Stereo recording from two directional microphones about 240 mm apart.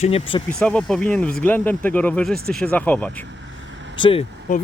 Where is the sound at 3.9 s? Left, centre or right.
Left.